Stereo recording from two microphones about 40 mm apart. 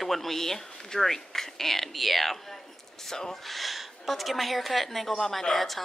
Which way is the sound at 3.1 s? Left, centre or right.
Centre.